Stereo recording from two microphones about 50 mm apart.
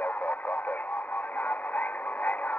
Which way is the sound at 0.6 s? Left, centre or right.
Left.